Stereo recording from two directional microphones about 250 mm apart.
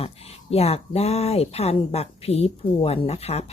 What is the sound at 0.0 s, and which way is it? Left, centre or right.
Speech, left.